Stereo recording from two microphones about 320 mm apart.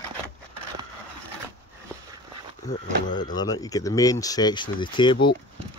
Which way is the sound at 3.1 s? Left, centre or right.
Left.